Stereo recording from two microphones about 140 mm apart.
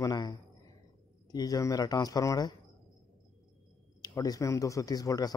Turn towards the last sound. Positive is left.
turn(degrees=25)  # may be behind; listen again after turning